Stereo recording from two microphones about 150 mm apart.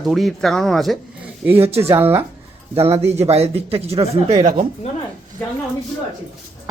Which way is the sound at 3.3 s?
40° right (ahead or behind).